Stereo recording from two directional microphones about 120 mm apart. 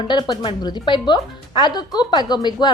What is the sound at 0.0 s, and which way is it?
Speech, 40° left (ahead or behind).